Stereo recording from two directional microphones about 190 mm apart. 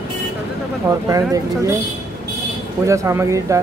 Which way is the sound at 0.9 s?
15° right (ahead or behind).